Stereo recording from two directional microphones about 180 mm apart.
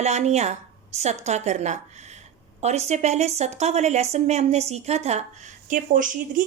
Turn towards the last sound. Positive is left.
turn(degrees=-45)  # may be behind; listen again after turning